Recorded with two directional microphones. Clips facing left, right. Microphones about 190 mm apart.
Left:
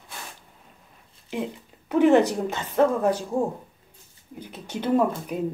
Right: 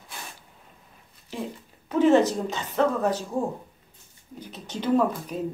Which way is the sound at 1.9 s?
15° left (ahead or behind).